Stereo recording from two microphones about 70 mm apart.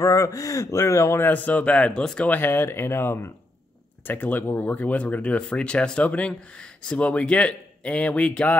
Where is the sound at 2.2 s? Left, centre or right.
Left.